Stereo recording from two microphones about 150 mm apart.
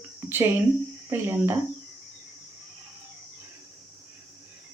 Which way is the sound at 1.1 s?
15° right (ahead or behind).